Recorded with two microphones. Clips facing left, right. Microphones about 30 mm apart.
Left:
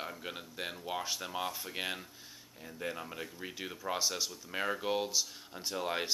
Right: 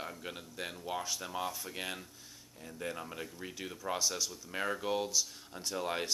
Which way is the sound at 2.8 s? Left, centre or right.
Centre.